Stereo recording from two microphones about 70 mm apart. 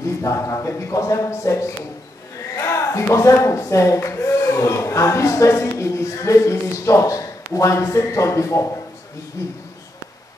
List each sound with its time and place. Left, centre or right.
0.2 s speech: left